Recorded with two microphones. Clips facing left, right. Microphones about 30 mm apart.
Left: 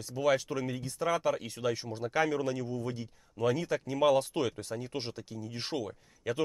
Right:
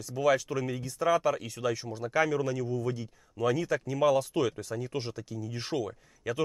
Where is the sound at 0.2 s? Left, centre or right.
Centre.